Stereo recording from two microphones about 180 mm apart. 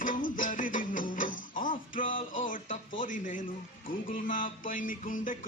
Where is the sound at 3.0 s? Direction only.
45° left (ahead or behind).